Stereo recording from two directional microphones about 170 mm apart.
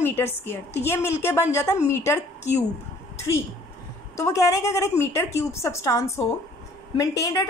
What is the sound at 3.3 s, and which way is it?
A woman's voice, 20° left (ahead or behind).